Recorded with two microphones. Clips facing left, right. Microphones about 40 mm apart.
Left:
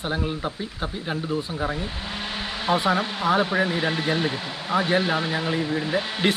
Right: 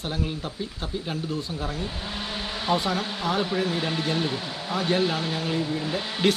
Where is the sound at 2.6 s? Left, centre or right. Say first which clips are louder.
Left 4 dB; left.